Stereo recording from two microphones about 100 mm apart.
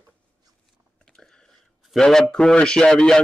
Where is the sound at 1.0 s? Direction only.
5° left (ahead or behind).